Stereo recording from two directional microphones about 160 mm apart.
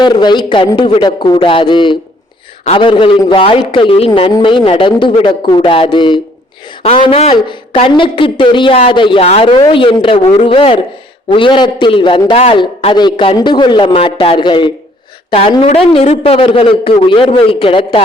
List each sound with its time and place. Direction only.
0.0 s a man's voice: 30° left (ahead or behind)